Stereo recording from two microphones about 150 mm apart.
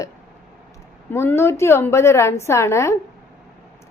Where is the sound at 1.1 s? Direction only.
15° left (ahead or behind).